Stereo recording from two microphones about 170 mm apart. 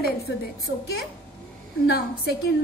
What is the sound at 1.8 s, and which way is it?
Speech, 70° left (ahead or behind).